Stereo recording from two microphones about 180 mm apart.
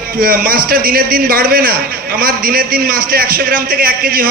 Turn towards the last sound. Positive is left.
turn(degrees=-55)  # may be behind; listen again after turning